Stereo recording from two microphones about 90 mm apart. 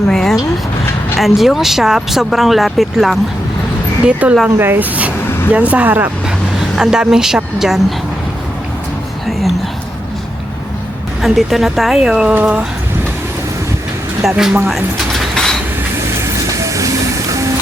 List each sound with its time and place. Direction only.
0.1 s a sound: 5° left (ahead or behind)
1.2 s speech: centre (ahead or behind)
4.0 s speech: 15° right (ahead or behind)
6.7 s speech: 5° right (ahead or behind)
11.2 s speech: centre (ahead or behind)
12.3 s speech: 20° right (ahead or behind)
14.3 s speech: 5° right (ahead or behind)
15.2 s train: 5° left (ahead or behind)
16.2 s train: 35° right (ahead or behind)